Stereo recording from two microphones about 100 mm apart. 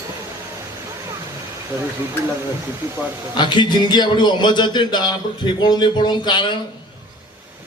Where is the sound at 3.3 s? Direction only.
50° left (ahead or behind).